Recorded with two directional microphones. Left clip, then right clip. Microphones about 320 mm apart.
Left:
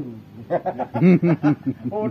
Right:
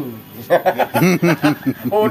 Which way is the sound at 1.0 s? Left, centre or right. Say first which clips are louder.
Left 1 dB; centre.